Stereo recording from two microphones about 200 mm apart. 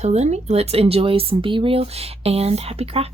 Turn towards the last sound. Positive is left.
turn(degrees=-30)  # may be behind; listen again after turning